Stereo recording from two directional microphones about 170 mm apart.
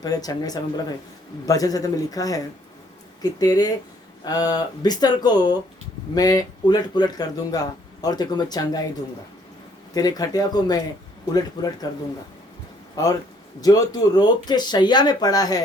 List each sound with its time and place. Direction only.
0.0 s speech: 20° left (ahead or behind)
9.9 s speech: 20° left (ahead or behind)
13.6 s speech: 20° left (ahead or behind)